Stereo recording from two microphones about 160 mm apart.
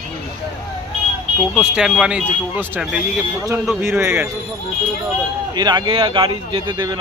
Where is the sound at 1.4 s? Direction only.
Centre (ahead or behind).